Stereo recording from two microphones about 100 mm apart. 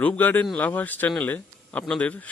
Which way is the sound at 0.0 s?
15° left (ahead or behind).